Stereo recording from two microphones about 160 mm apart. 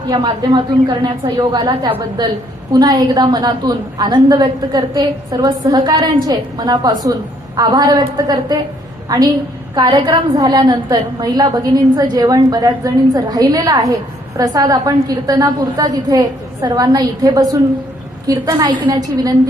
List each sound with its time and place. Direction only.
0.1 s a woman's voice: 25° right (ahead or behind)